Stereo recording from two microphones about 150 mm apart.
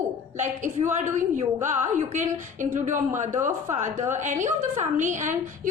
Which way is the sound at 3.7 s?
50° right (ahead or behind).